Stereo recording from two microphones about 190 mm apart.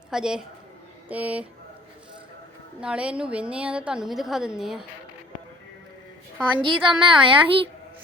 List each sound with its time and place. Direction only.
0.1 s a woman's voice: 5° right (ahead or behind)
2.8 s a woman's voice: 5° right (ahead or behind)
6.6 s a woman's voice: 25° right (ahead or behind)